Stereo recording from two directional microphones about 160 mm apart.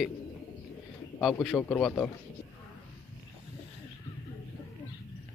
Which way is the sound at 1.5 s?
10° left (ahead or behind).